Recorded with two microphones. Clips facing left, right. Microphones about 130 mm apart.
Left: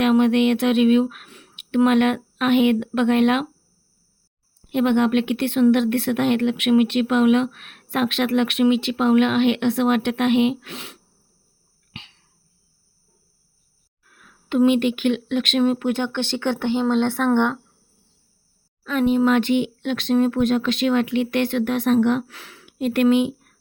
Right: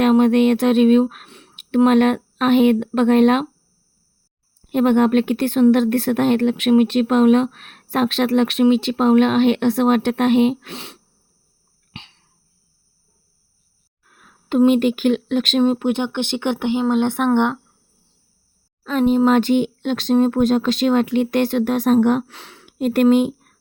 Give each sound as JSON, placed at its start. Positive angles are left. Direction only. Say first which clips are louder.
{"t": 0.0, "sound": "speech", "louder": "right 3 dB", "side_deg": -40}
{"t": 1.3, "sound": "speech", "louder": "right 3 dB", "side_deg": -25}
{"t": 4.7, "sound": "speech", "louder": "right 3 dB", "side_deg": -40}
{"t": 11.9, "sound": "cough", "louder": "right 2 dB", "side_deg": -30}
{"t": 14.1, "sound": "speech", "louder": "right 3 dB", "side_deg": -35}
{"t": 18.8, "sound": "speech", "louder": "right 3 dB", "side_deg": -35}
{"t": 22.3, "sound": "speech", "louder": "right 2 dB", "side_deg": -25}
{"t": 22.6, "sound": "speech", "louder": "right 3 dB", "side_deg": -45}